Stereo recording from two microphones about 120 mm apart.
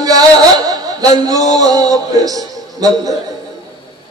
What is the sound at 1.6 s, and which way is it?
A man's voice, 30° right (ahead or behind).